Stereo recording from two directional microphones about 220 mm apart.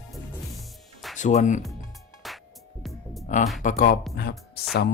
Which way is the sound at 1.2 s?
35° left (ahead or behind).